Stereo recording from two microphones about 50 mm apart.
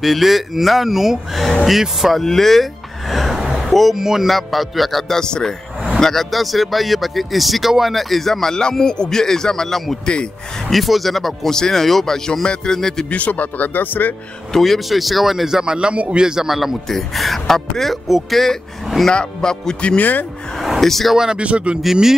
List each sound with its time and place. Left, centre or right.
0.0 s speech: centre
2.2 s a sound: centre
3.6 s speech: centre
13.1 s speech: left
14.5 s speech: centre
19.0 s speech: centre
20.0 s speech: left
20.8 s speech: centre
21.2 s speech: centre